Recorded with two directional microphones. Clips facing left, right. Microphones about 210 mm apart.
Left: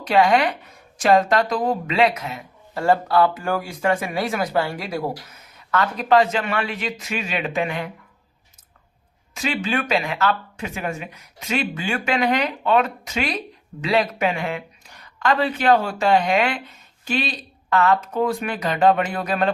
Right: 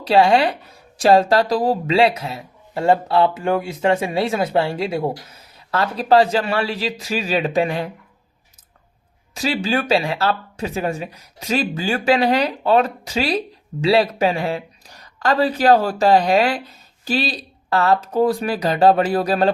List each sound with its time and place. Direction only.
0.0 s speech: 30° right (ahead or behind)
9.3 s speech: 35° right (ahead or behind)